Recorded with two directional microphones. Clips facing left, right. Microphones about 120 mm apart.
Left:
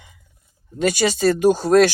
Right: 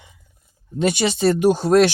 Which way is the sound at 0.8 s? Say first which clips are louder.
Even; 25° right (ahead or behind).